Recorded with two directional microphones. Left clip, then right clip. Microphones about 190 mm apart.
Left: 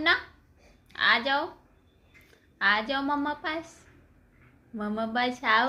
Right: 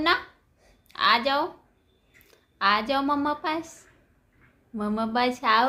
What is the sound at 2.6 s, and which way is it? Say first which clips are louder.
A woman's voice: right 2 dB; 20° right (ahead or behind).